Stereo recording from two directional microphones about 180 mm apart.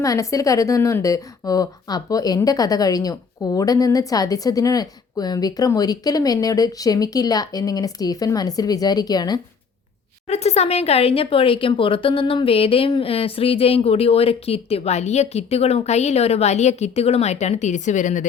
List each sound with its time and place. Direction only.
0.0 s a woman's voice: 20° left (ahead or behind)
10.2 s speech: 35° left (ahead or behind)